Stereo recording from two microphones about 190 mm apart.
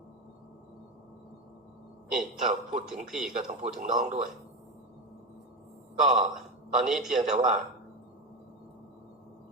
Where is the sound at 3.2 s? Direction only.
5° right (ahead or behind).